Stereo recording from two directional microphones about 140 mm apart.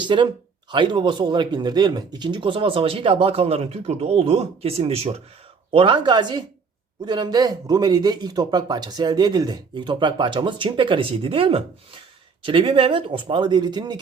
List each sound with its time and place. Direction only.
0.0 s speech: 35° right (ahead or behind)
5.7 s speech: 35° right (ahead or behind)